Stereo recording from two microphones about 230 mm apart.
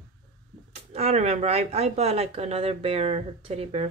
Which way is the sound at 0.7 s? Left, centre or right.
Right.